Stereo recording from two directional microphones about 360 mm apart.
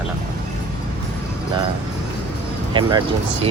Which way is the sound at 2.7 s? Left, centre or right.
Centre.